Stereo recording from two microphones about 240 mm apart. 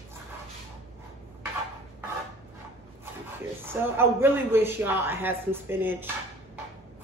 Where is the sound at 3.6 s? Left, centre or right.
Centre.